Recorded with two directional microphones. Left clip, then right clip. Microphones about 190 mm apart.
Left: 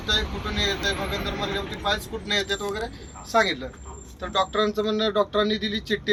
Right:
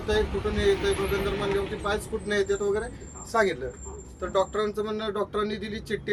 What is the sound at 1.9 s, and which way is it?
Speech, 20° right (ahead or behind).